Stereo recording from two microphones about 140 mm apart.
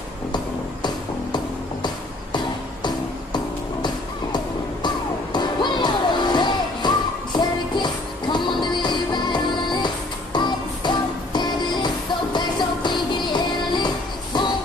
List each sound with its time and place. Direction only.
0.8 s music: 30° left (ahead or behind)
4.8 s music: 35° left (ahead or behind)